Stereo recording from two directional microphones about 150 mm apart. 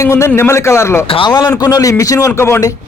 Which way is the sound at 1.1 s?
30° left (ahead or behind).